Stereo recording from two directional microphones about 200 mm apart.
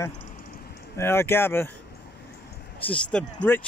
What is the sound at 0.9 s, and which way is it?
Speech, 10° left (ahead or behind).